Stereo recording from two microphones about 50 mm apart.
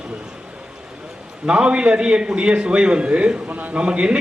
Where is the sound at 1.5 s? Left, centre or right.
Right.